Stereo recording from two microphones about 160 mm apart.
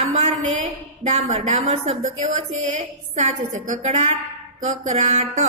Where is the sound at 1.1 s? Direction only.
45° right (ahead or behind).